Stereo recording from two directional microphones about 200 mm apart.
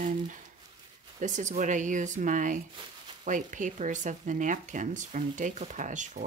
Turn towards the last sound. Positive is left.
turn(degrees=-40)  # may be behind; listen again after turning